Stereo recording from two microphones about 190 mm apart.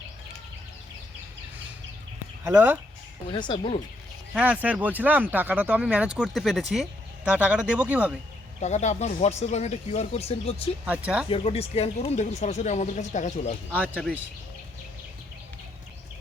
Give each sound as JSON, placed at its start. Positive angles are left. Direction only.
{"t": 2.5, "sound": "speech", "side_deg": -10}
{"t": 3.3, "sound": "speech", "side_deg": 25}
{"t": 4.4, "sound": "speech", "side_deg": -10}
{"t": 8.6, "sound": "speech", "side_deg": 35}
{"t": 10.8, "sound": "speech", "side_deg": -5}
{"t": 11.3, "sound": "speech", "side_deg": 30}
{"t": 13.7, "sound": "speech", "side_deg": 10}